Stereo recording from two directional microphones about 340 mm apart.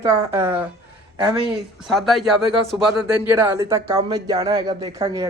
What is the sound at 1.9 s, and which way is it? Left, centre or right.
Speech, centre.